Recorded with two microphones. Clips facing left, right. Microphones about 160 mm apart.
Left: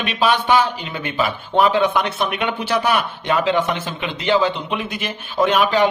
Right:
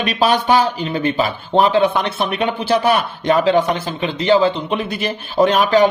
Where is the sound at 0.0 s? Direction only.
40° right (ahead or behind).